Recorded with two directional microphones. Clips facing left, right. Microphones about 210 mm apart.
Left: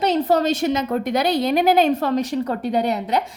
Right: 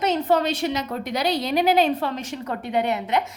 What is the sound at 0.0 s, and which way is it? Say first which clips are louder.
A woman's voice: left 3 dB; 35° left (ahead or behind).